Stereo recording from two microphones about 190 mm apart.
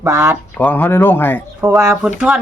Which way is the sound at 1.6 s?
15° right (ahead or behind).